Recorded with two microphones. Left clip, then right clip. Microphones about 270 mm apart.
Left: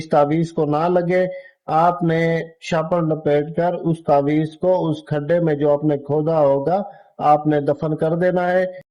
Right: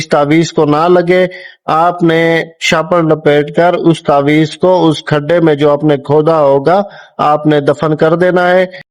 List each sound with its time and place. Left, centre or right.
0.1 s mantra: right